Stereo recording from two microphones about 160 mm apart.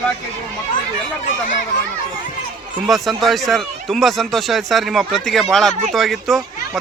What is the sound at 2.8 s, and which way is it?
Speech, centre (ahead or behind).